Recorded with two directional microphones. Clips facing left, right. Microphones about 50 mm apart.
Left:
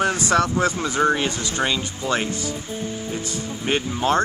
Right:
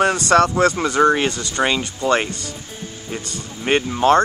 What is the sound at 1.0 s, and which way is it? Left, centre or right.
Speech, centre.